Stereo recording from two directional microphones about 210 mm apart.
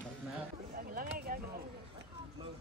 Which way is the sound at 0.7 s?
45° right (ahead or behind).